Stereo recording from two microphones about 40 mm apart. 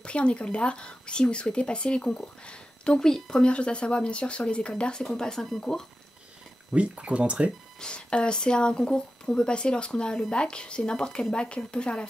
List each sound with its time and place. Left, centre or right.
0.0 s speech: left
5.0 s speech: centre
6.7 s speech: right
7.8 s speech: left